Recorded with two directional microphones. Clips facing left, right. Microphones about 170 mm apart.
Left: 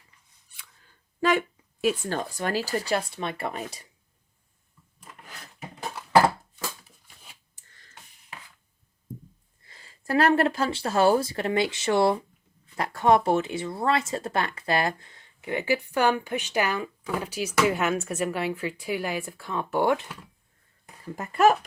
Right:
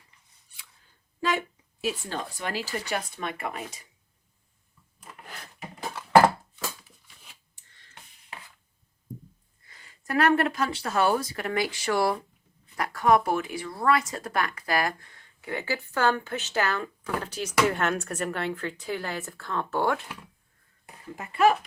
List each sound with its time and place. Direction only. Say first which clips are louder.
1.2 s speech: left 4 dB; 60° left (ahead or behind); by 3.8 s 30° left (ahead or behind)
9.6 s speech: left 4 dB; 30° left (ahead or behind)
21.2 s speech: left 2 dB; 45° left (ahead or behind)